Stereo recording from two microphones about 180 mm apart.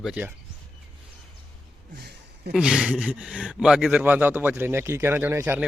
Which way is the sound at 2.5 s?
5° right (ahead or behind).